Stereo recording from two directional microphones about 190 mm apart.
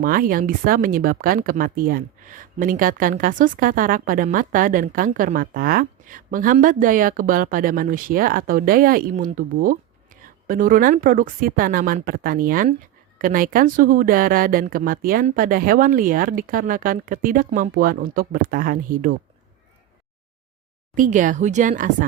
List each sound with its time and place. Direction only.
0.0 s speech: 50° right (ahead or behind)
20.9 s speech: 45° right (ahead or behind)